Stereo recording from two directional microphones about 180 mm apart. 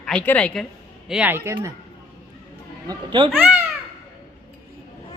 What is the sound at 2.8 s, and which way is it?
Speech, 25° right (ahead or behind).